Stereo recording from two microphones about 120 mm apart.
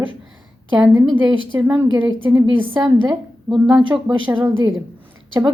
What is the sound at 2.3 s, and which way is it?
Speech, 15° right (ahead or behind).